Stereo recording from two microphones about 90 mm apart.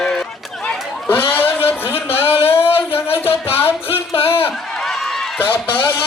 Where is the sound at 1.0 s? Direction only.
20° left (ahead or behind).